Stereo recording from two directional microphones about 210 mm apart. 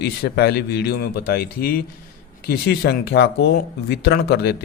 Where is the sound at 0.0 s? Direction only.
50° left (ahead or behind).